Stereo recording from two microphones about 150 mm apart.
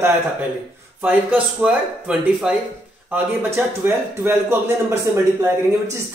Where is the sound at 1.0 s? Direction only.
10° right (ahead or behind).